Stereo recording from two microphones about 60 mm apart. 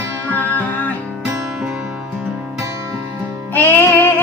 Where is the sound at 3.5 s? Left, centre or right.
Left.